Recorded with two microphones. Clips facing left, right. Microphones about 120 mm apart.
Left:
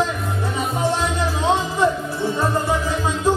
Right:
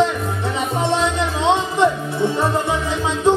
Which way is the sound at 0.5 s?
25° right (ahead or behind).